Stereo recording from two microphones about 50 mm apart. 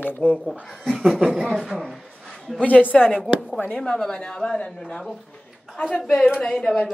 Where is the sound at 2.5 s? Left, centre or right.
Left.